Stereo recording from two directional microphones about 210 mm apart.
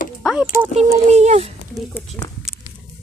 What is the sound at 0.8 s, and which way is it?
Speech, 30° right (ahead or behind).